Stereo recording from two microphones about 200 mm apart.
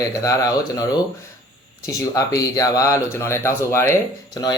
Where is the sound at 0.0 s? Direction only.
15° left (ahead or behind).